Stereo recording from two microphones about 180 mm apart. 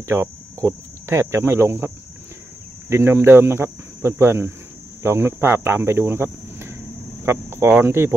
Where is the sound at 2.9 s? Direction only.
15° right (ahead or behind).